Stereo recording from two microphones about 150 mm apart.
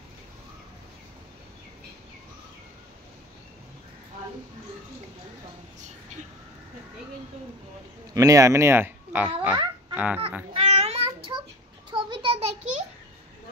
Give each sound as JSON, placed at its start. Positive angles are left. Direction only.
{"t": 8.1, "sound": "speech", "side_deg": -25}
{"t": 9.9, "sound": "fowl", "side_deg": -10}
{"t": 10.5, "sound": "babbling", "side_deg": -45}
{"t": 11.9, "sound": "a sound", "side_deg": -35}